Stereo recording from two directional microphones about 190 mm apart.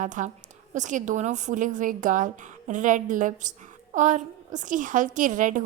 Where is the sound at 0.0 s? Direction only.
40° right (ahead or behind).